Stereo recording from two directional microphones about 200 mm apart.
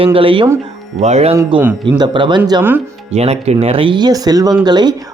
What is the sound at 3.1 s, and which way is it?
Speech, 30° right (ahead or behind).